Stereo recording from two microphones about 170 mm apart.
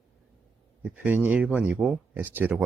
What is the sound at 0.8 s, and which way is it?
Speech, 10° right (ahead or behind).